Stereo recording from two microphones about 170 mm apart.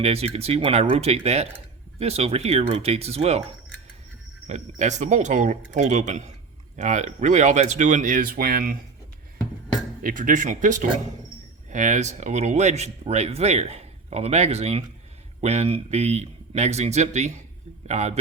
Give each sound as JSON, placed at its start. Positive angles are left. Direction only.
{"t": 0.0, "sound": "speech", "side_deg": -35}
{"t": 4.4, "sound": "speech", "side_deg": -45}
{"t": 10.0, "sound": "speech", "side_deg": -55}